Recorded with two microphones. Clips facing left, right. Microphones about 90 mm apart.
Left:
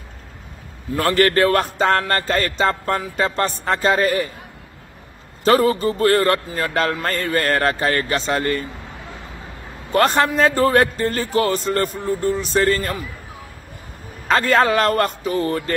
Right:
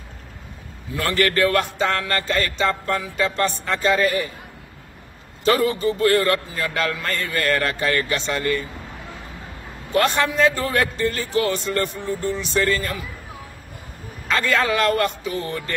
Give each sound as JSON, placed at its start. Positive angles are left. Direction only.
{"t": 0.9, "sound": "speech", "side_deg": 40}
{"t": 5.4, "sound": "speech", "side_deg": 40}
{"t": 9.9, "sound": "speech", "side_deg": 40}
{"t": 14.2, "sound": "speech", "side_deg": 40}